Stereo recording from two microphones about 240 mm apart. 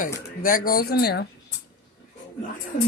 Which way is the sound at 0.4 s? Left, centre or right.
Left.